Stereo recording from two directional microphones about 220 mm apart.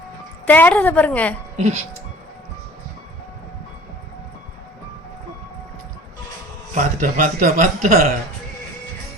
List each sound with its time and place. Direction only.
0.4 s a woman's voice: 10° left (ahead or behind)
1.5 s a man's voice: 30° right (ahead or behind)
6.7 s a man's voice: 35° right (ahead or behind)